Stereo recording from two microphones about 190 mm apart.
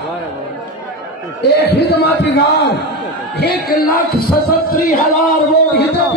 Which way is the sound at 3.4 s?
55° left (ahead or behind).